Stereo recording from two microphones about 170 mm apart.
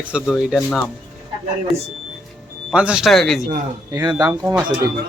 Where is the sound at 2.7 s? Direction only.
5° right (ahead or behind).